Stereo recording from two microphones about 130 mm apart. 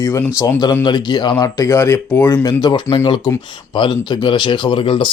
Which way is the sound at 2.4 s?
30° left (ahead or behind).